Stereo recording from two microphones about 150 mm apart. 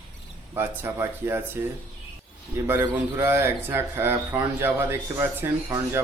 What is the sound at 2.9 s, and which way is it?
Speech, 15° right (ahead or behind).